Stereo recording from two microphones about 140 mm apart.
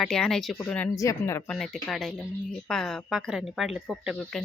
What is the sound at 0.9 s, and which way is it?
Speech, 20° left (ahead or behind).